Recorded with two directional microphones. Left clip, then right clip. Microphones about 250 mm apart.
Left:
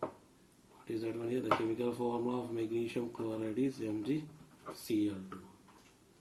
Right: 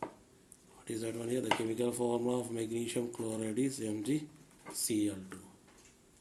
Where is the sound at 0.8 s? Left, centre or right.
Right.